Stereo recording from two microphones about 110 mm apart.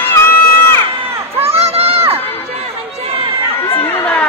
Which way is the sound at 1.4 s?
65° right (ahead or behind).